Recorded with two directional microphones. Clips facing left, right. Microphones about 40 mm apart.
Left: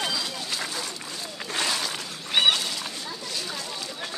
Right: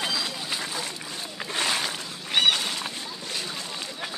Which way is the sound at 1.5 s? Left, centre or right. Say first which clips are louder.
Right 1 dB; right.